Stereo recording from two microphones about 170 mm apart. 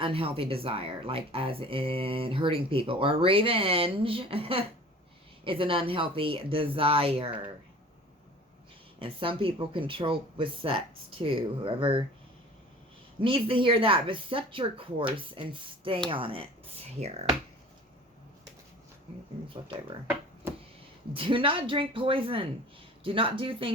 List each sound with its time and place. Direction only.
0.0 s speech: 30° right (ahead or behind)
9.0 s speech: 30° right (ahead or behind)
13.1 s speech: 30° right (ahead or behind)
21.1 s speech: 30° right (ahead or behind)